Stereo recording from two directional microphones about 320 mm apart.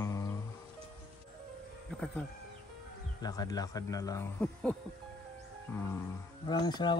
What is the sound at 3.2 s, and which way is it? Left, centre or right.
Speech, centre.